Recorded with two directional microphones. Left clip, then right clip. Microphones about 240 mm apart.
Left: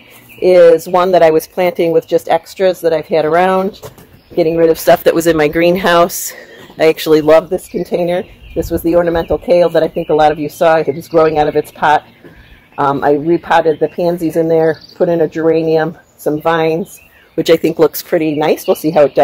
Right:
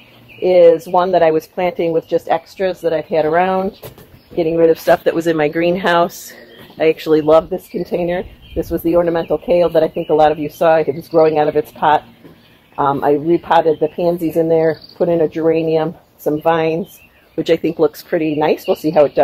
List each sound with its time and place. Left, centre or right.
0.4 s speech: left